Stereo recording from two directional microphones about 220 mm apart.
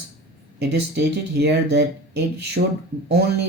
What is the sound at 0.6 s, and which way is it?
Speech, 50° right (ahead or behind).